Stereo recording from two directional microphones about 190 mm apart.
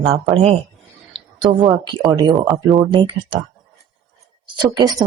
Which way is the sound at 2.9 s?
25° right (ahead or behind).